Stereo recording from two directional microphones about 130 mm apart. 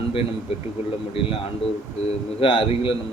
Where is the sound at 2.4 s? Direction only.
40° left (ahead or behind).